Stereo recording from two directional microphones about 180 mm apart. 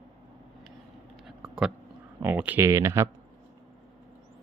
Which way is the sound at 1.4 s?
Centre (ahead or behind).